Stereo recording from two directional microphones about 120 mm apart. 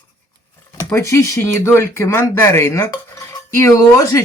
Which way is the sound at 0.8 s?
25° left (ahead or behind).